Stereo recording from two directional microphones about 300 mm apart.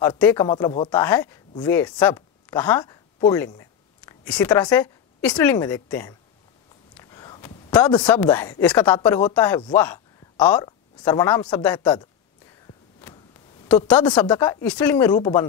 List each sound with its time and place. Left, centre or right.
0.0 s speech: centre
0.8 s speech: centre
7.0 s a sound: centre
8.1 s speech: centre
13.7 s speech: centre